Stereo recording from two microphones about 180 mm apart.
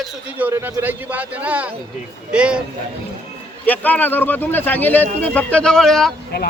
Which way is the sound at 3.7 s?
10° left (ahead or behind).